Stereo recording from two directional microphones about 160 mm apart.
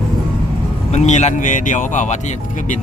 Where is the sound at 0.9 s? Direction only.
45° left (ahead or behind).